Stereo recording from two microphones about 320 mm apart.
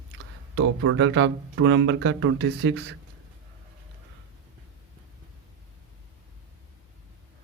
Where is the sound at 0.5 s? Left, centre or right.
Right.